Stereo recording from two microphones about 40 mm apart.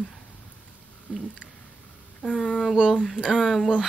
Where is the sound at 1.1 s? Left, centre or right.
Centre.